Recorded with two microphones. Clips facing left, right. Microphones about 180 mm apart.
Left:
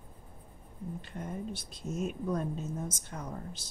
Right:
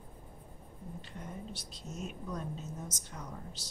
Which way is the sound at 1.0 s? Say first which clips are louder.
Left 6 dB; 55° left (ahead or behind).